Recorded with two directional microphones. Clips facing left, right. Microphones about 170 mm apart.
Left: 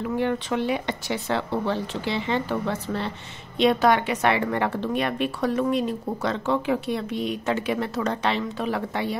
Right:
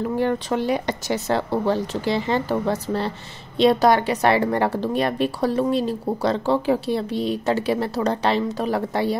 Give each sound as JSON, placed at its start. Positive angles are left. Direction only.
{"t": 0.2, "sound": "a woman's voice", "side_deg": -40}